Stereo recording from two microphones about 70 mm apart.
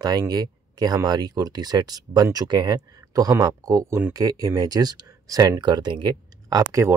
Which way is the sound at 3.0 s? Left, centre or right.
Right.